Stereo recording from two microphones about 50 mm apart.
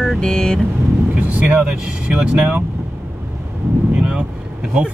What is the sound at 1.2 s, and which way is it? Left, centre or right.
Speech, right.